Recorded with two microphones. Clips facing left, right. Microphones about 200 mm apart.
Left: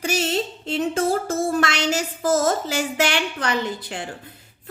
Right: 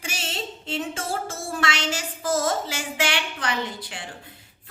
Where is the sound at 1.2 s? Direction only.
40° left (ahead or behind).